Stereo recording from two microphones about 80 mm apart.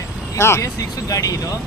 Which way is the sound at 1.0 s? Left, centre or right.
Left.